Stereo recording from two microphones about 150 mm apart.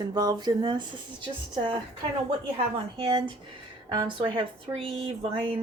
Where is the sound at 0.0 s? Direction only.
30° right (ahead or behind).